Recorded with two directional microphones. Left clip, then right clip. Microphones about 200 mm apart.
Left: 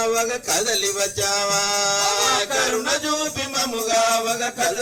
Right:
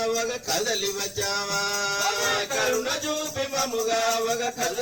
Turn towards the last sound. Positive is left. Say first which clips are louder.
# left 5 dB
turn(degrees=40)  # may be behind; listen again after turning